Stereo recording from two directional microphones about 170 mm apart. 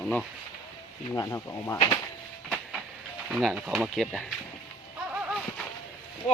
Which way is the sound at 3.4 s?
Centre (ahead or behind).